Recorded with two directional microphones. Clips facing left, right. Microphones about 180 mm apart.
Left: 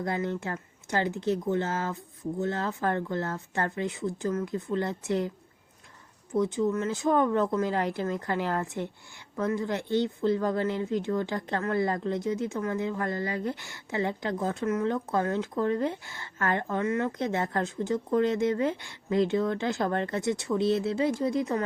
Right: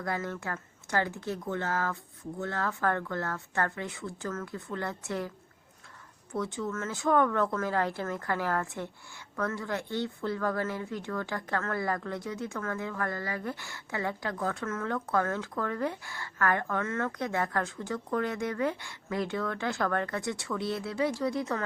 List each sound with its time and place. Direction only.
0.0 s speech: 20° left (ahead or behind)
6.3 s speech: 20° left (ahead or behind)